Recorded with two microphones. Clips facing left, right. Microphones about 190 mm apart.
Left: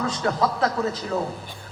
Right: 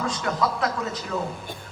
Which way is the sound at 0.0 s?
35° left (ahead or behind).